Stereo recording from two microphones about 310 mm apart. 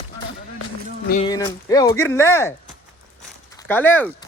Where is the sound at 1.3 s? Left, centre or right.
Centre.